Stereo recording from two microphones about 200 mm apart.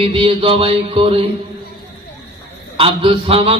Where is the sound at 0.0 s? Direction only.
25° right (ahead or behind).